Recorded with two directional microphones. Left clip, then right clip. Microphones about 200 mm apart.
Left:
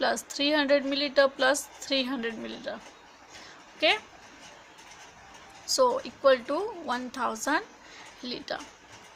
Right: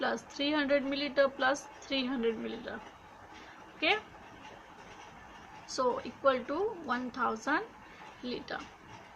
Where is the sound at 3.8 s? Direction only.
60° left (ahead or behind).